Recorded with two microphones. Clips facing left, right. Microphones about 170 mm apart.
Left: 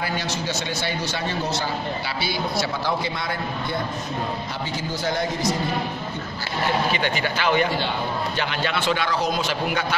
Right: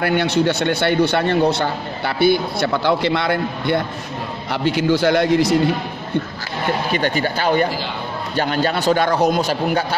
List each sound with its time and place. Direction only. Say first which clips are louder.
0.0 s a man's voice: right 10 dB; 60° right (ahead or behind)
6.9 s a man's voice: right 5 dB; 40° right (ahead or behind); by 9.4 s 55° right (ahead or behind)
9.4 s a man's voice: right 6 dB; 40° right (ahead or behind)